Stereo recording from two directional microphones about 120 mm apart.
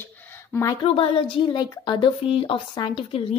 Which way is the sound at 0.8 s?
50° left (ahead or behind).